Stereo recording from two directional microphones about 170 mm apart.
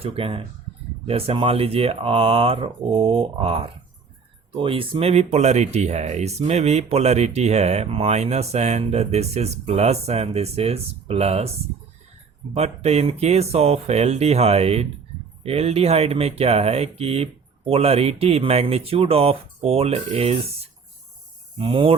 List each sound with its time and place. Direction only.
0.0 s speech: 30° right (ahead or behind)
12.5 s speech: 40° right (ahead or behind)
21.6 s speech: 30° right (ahead or behind)